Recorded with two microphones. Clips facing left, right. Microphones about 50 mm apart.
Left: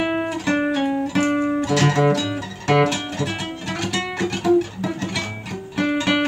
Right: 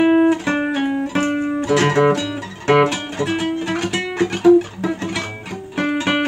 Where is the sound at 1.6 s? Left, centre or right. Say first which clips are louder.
Right 6 dB; centre.